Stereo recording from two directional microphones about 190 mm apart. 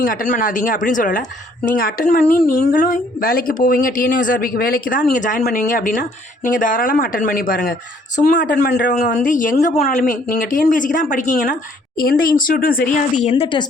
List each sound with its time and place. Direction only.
0.0 s speech: 45° left (ahead or behind); by 13.7 s 25° left (ahead or behind)